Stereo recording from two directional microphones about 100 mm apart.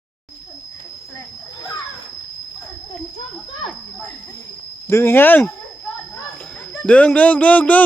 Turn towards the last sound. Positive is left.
turn(degrees=15)  # may be behind; listen again after turning